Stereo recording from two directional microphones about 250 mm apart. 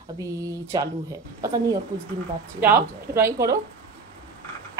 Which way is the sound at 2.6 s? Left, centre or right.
Centre.